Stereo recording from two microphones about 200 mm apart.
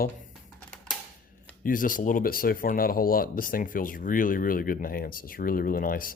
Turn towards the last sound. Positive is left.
turn(degrees=45)  # may be behind; listen again after turning